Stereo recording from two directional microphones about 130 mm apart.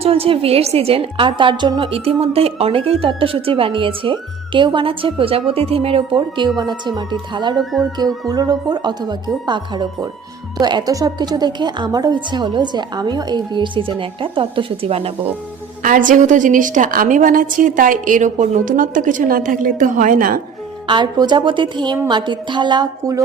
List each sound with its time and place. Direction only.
0.0 s a woman's voice: 50° right (ahead or behind)
15.8 s a woman's voice: 90° right
20.8 s a woman's voice: 35° right (ahead or behind)